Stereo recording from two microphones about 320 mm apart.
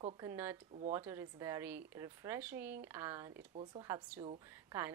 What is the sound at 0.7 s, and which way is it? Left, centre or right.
Speech, right.